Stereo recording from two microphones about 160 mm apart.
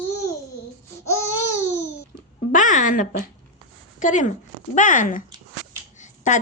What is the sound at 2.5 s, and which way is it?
A woman's voice, 55° left (ahead or behind).